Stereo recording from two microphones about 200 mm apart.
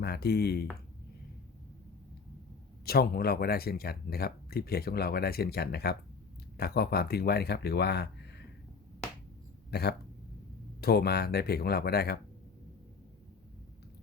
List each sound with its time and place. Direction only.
0.0 s speech: 55° left (ahead or behind)
2.8 s speech: 50° left (ahead or behind)
10.8 s speech: 50° left (ahead or behind)